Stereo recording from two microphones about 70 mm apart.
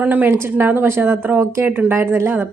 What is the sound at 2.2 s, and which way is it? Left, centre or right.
Speech, right.